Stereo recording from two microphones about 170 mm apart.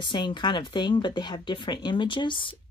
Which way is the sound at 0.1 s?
25° left (ahead or behind).